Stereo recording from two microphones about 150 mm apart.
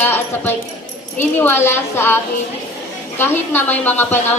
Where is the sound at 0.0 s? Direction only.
15° left (ahead or behind).